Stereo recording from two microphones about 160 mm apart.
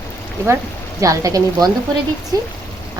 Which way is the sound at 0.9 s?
20° right (ahead or behind).